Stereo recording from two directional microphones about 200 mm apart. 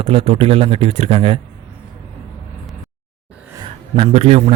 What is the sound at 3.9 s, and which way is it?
Speech, 30° right (ahead or behind).